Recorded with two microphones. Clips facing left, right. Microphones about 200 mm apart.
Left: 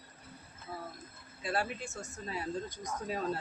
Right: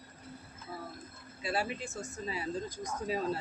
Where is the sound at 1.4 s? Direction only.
Centre (ahead or behind).